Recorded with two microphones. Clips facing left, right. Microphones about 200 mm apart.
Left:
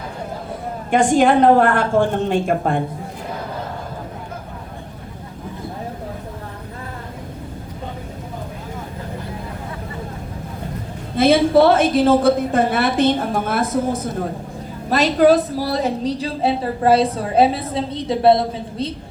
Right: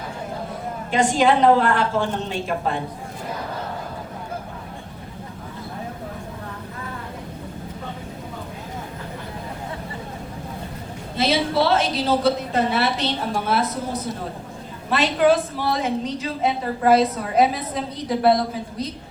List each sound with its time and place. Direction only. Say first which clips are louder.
0.9 s a woman's voice: left 4 dB; 50° left (ahead or behind)
11.2 s a woman's voice: left 8 dB; 50° left (ahead or behind)
14.8 s a woman's voice: left 4 dB; 40° left (ahead or behind)